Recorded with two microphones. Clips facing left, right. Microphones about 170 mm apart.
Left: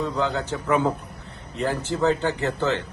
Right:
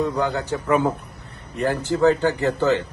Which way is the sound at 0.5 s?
Centre (ahead or behind).